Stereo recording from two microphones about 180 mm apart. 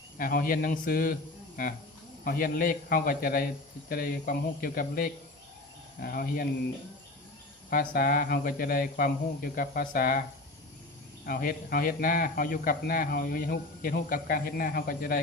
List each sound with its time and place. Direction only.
0.2 s speech: 50° left (ahead or behind)
2.2 s speech: 50° left (ahead or behind)
7.7 s speech: 55° left (ahead or behind)
11.3 s speech: 55° left (ahead or behind)